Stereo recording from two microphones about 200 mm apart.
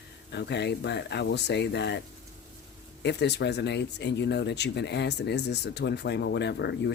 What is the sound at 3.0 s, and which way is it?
Speech, 60° left (ahead or behind).